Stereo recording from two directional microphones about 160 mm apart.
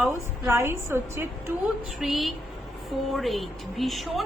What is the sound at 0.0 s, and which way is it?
A woman's voice, 15° right (ahead or behind).